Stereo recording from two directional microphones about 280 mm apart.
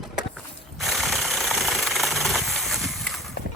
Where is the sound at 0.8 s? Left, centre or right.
Centre.